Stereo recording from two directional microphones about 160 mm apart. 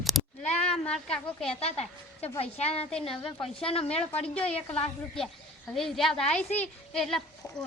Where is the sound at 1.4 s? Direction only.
35° left (ahead or behind).